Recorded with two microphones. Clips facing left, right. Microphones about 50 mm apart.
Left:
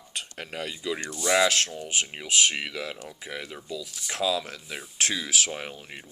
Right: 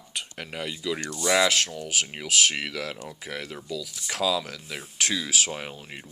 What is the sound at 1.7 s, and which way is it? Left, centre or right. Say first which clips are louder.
Speech: right 1 dB; left.